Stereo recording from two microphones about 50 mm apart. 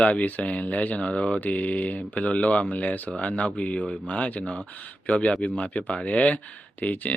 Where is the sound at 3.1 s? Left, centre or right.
Left.